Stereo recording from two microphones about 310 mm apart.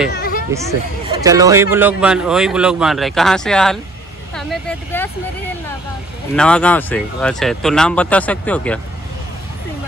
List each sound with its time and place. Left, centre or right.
0.1 s a sound: left
0.5 s speech: centre
6.3 s speech: centre